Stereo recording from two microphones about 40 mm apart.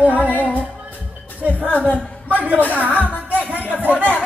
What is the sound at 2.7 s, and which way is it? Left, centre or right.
Speech, right.